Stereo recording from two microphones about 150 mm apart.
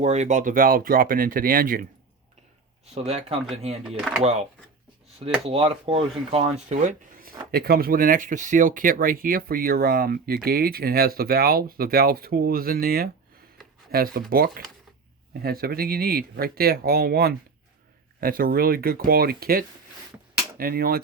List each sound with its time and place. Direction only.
0.0 s speech: 50° right (ahead or behind); by 1.9 s 70° right (ahead or behind)
2.8 s speech: 45° right (ahead or behind)
3.8 s speech: 5° right (ahead or behind)
4.2 s speech: 45° right (ahead or behind)
5.5 s speech: 35° right (ahead or behind)
7.2 s speech: 85° right
15.3 s speech: 90° right
18.2 s speech: 70° right (ahead or behind)